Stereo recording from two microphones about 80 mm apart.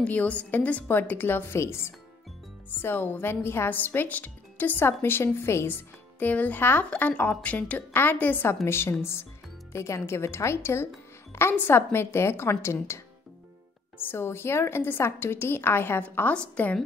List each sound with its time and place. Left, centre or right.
0.0 s a woman's voice: centre
13.9 s speech: left